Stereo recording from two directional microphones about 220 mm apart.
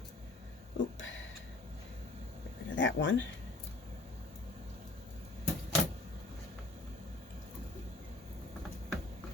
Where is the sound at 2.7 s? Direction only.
60° left (ahead or behind).